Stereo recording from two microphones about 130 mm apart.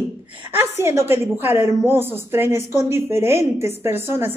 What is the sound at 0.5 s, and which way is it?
A woman's voice, 20° right (ahead or behind).